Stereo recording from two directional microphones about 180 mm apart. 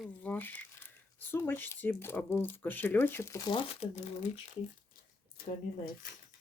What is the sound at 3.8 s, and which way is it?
Speech, 40° left (ahead or behind).